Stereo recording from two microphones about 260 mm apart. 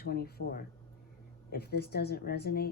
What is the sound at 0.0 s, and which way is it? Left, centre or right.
Speech, left.